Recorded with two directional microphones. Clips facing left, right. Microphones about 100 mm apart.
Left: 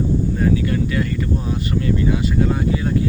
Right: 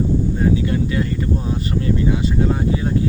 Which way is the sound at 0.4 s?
25° right (ahead or behind).